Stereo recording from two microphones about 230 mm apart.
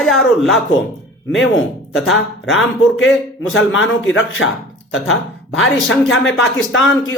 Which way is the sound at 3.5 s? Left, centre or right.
Left.